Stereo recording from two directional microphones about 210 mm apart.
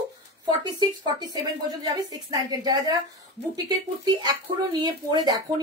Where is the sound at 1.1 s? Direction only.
20° right (ahead or behind).